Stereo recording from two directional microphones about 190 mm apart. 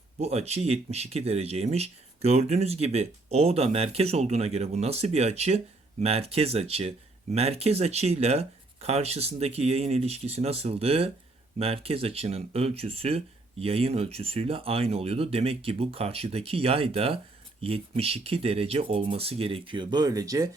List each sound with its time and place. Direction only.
0.2 s speech: 35° right (ahead or behind)